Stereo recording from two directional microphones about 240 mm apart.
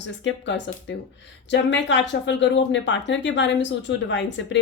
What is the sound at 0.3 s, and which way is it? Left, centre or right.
Speech, left.